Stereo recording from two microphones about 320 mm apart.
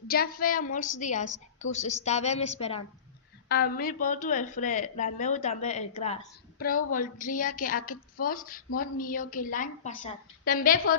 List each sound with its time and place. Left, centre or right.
0.1 s a woman's voice: left